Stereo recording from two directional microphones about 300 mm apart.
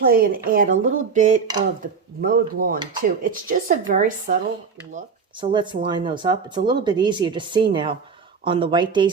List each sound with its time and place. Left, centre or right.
0.0 s speech: right